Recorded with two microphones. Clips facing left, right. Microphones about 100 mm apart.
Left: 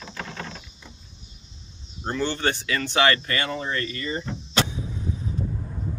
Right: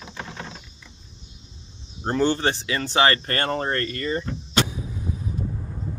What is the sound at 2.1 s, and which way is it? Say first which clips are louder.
Speech: right 4 dB; 40° right (ahead or behind).